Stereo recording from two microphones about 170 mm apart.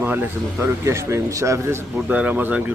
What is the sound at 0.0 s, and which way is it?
Speech, 10° right (ahead or behind).